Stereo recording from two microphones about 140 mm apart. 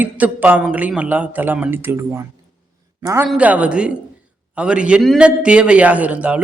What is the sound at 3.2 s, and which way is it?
Speech, 10° right (ahead or behind).